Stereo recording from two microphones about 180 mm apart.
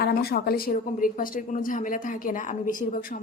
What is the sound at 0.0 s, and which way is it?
A woman's voice, 60° left (ahead or behind).